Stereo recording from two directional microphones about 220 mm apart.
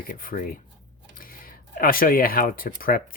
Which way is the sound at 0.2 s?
40° left (ahead or behind).